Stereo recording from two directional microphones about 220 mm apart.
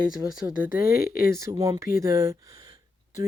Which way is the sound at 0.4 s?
10° right (ahead or behind).